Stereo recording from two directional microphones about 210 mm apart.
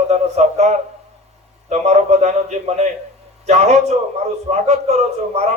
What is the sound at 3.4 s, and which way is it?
A man's voice, 30° right (ahead or behind).